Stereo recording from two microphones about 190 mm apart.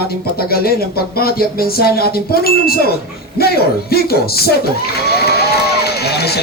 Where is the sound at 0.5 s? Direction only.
55° left (ahead or behind).